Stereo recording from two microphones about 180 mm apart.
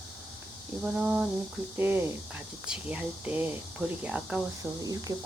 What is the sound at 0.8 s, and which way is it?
Speech, 5° right (ahead or behind).